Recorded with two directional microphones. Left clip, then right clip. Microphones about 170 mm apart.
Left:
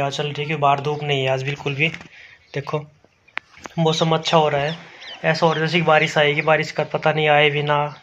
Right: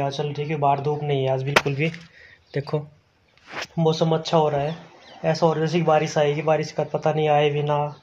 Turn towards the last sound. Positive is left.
turn(degrees=-10)  # may be behind; listen again after turning